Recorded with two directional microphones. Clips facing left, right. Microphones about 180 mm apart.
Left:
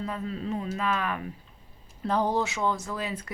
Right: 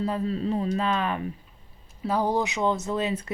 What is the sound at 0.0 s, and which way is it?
Speech, 30° right (ahead or behind).